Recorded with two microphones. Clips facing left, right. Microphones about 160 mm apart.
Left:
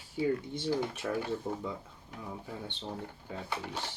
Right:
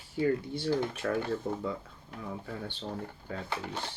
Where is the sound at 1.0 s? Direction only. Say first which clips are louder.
Right 3 dB; 5° left (ahead or behind).